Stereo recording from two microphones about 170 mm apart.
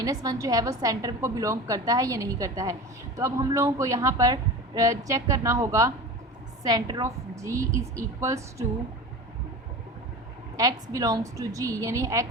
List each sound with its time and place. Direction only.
0.0 s a woman's voice: 20° right (ahead or behind)
10.6 s a woman's voice: 20° right (ahead or behind)